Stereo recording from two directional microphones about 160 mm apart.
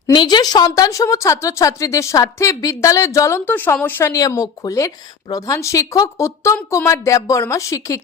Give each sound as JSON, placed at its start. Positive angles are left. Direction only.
{"t": 0.1, "sound": "speech", "side_deg": 25}